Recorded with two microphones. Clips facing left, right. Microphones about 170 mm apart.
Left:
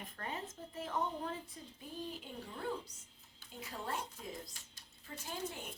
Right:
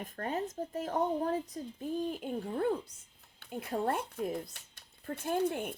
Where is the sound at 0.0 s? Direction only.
45° right (ahead or behind).